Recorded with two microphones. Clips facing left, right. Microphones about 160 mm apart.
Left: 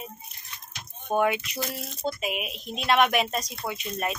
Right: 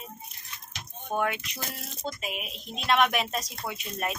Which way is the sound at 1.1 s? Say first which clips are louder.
Left 5 dB; 15° left (ahead or behind).